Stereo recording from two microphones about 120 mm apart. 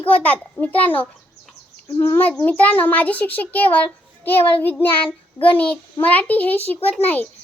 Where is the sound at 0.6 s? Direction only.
15° left (ahead or behind).